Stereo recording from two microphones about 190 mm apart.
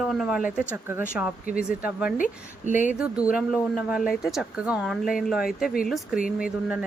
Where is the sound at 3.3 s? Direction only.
5° right (ahead or behind).